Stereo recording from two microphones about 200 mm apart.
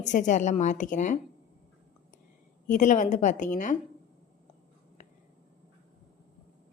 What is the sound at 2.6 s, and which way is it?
A woman's voice, 40° left (ahead or behind).